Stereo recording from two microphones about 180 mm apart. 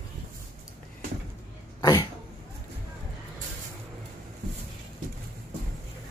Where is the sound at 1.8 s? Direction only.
20° left (ahead or behind).